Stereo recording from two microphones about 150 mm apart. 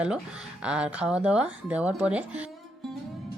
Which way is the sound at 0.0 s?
5° right (ahead or behind).